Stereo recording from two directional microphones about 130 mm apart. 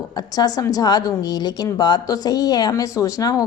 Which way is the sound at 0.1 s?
30° left (ahead or behind).